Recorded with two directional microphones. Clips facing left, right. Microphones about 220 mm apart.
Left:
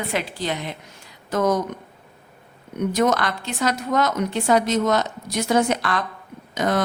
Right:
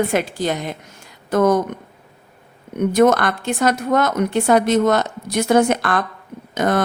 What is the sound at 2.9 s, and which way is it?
A woman's voice, 55° right (ahead or behind).